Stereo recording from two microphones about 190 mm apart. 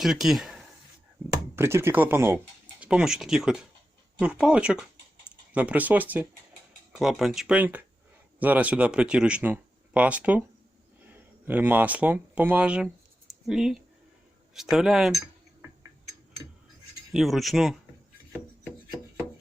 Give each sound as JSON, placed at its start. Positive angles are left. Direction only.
{"t": 0.0, "sound": "speech", "side_deg": 0}
{"t": 1.5, "sound": "speech", "side_deg": -15}
{"t": 17.1, "sound": "speech", "side_deg": 0}